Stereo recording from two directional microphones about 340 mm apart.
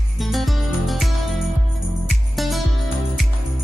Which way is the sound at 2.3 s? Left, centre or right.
Centre.